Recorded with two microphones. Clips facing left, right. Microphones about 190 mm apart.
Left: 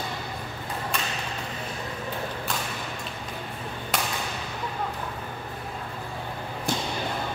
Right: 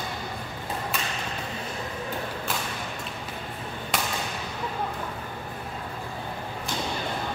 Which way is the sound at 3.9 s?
Centre (ahead or behind).